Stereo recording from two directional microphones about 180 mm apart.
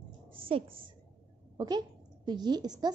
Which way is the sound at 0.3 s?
30° right (ahead or behind).